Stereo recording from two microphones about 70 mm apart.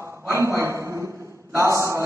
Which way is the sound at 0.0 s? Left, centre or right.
Right.